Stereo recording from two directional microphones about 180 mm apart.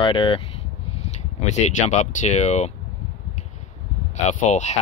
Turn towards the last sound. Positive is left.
turn(degrees=40)  # may be behind; listen again after turning